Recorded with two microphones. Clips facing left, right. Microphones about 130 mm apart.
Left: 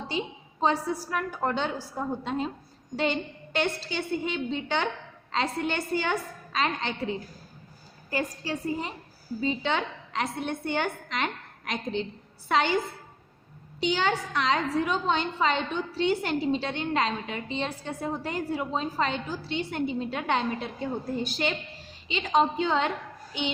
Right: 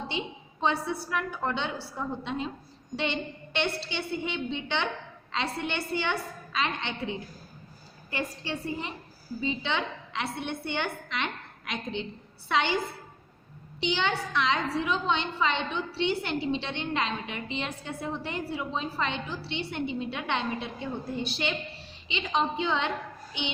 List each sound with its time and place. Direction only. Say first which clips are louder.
0.1 s a woman's voice: left 3 dB; 40° left (ahead or behind)
13.7 s a woman's voice: left 2 dB; 45° left (ahead or behind)